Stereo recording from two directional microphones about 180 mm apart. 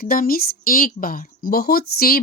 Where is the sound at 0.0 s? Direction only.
55° left (ahead or behind).